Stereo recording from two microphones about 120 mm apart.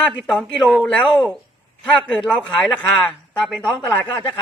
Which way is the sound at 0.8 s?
5° left (ahead or behind).